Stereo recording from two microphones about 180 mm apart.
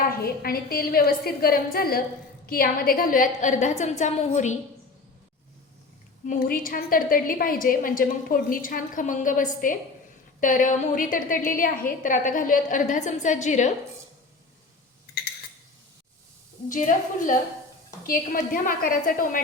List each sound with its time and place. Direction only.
0.2 s a woman's voice: 55° left (ahead or behind)
6.2 s a woman's voice: 50° left (ahead or behind)
16.6 s a woman's voice: 45° left (ahead or behind)